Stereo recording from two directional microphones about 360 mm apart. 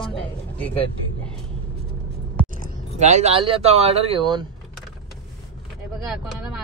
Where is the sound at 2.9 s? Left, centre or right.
Centre.